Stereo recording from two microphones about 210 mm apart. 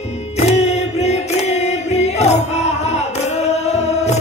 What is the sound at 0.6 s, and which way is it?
Chant, 30° left (ahead or behind).